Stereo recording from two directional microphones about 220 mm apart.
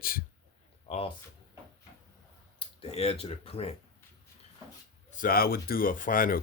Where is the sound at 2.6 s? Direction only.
30° left (ahead or behind).